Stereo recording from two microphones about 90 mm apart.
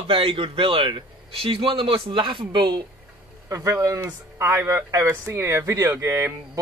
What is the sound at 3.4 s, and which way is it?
Speech, 40° right (ahead or behind).